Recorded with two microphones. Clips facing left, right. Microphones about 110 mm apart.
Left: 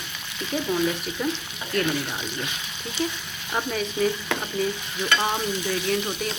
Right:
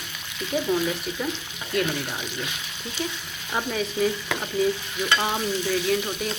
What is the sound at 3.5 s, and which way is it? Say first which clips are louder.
Stir: even; centre (ahead or behind).